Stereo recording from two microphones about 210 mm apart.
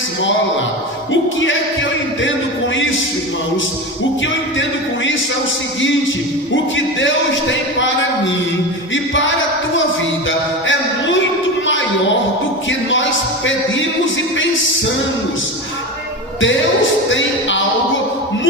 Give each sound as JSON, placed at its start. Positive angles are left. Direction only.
{"t": 1.1, "sound": "music", "side_deg": 65}
{"t": 6.7, "sound": "music", "side_deg": 60}
{"t": 10.2, "sound": "a sound", "side_deg": 65}
{"t": 12.6, "sound": "a man's voice", "side_deg": 65}
{"t": 17.1, "sound": "music", "side_deg": 65}